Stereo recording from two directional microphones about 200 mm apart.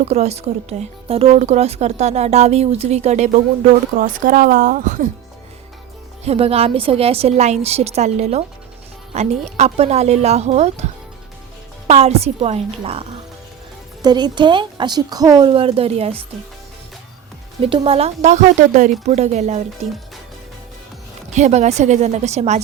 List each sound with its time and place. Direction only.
0.0 s speech: 35° right (ahead or behind)
6.2 s speech: 30° right (ahead or behind)
11.9 s a woman's voice: 30° right (ahead or behind)
17.6 s speech: 30° right (ahead or behind)
21.3 s speech: 35° right (ahead or behind)